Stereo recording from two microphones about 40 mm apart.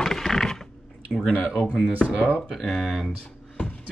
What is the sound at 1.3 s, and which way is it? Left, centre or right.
Speech, left.